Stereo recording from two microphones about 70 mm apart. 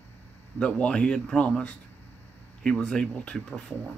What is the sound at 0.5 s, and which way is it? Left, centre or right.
Speech, centre.